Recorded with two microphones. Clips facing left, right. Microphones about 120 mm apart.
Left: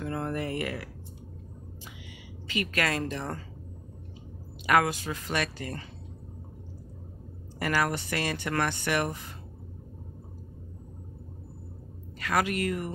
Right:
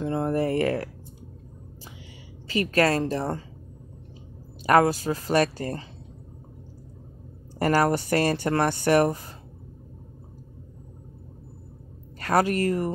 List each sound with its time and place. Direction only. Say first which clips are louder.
0.0 s a sound: right 7 dB; 30° right (ahead or behind)
2.4 s speech: right 8 dB; 35° right (ahead or behind)
4.6 s speech: right 5 dB; 35° right (ahead or behind)
7.5 s speech: right 7 dB; 40° right (ahead or behind)
12.2 s speech: right 5 dB; 40° right (ahead or behind)